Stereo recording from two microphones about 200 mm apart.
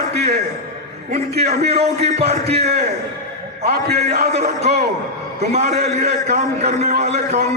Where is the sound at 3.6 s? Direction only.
55° right (ahead or behind).